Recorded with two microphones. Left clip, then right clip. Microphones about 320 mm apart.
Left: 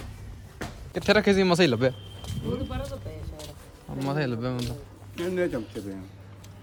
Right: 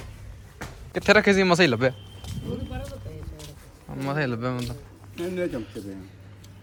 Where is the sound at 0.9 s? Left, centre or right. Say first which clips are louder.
Right 3 dB; centre.